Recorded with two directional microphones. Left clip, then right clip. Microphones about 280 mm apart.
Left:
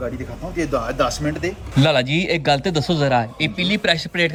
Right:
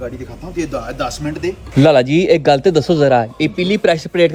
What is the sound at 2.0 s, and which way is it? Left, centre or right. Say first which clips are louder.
Speech: right 8 dB; left.